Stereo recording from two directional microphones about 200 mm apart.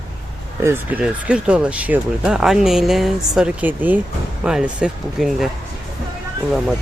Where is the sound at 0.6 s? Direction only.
10° right (ahead or behind).